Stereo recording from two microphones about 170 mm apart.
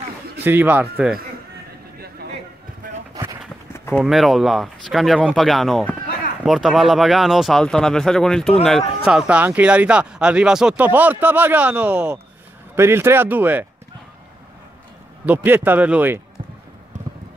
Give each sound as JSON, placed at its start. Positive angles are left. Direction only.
{"t": 0.4, "sound": "speech", "side_deg": -10}
{"t": 3.7, "sound": "run", "side_deg": 15}
{"t": 4.0, "sound": "speech", "side_deg": 0}
{"t": 15.2, "sound": "speech", "side_deg": -10}